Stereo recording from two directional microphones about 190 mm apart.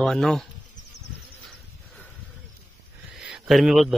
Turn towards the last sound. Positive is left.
turn(degrees=0)  # may be behind; listen again after turning